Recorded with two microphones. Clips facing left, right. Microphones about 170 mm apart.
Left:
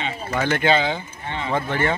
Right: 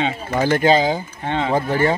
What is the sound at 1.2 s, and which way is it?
Speech, 65° right (ahead or behind).